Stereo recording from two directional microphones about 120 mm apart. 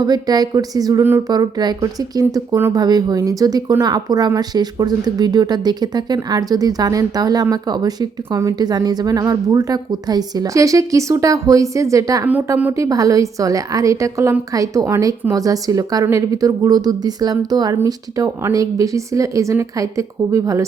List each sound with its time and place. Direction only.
0.0 s a woman's voice: 35° right (ahead or behind)